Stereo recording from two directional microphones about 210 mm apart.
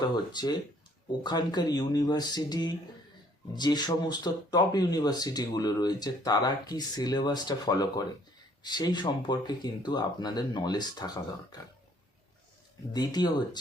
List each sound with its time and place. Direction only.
0.0 s speech: 20° left (ahead or behind)
12.9 s speech: 20° left (ahead or behind)